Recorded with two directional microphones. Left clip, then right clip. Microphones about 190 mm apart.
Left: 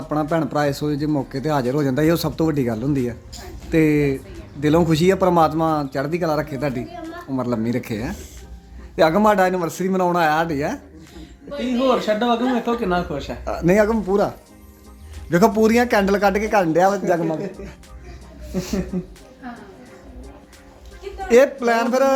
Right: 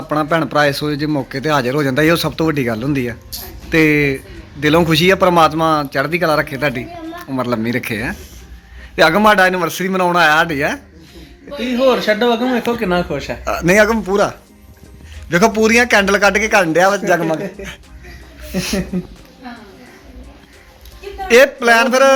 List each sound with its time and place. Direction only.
0.1 s a man's voice: 10° left (ahead or behind)
11.9 s speech: 40° right (ahead or behind)
13.4 s a man's voice: 10° left (ahead or behind)
15.3 s a man's voice: 20° left (ahead or behind)
17.2 s speech: centre (ahead or behind)
21.2 s a man's voice: 10° left (ahead or behind)